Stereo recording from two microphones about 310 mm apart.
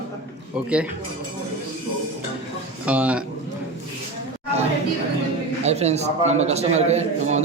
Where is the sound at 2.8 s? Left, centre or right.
Centre.